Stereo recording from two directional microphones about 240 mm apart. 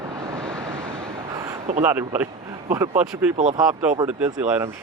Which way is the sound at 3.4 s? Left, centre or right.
Right.